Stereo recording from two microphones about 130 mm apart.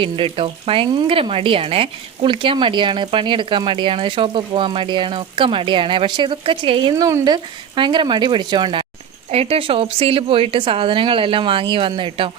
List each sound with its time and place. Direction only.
0.0 s speech: 40° right (ahead or behind)
6.9 s speech: 20° right (ahead or behind)
7.3 s speech: 35° right (ahead or behind)
9.3 s a woman's voice: 50° right (ahead or behind)